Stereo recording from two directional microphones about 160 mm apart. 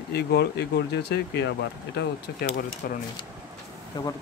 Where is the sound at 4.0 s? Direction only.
25° left (ahead or behind).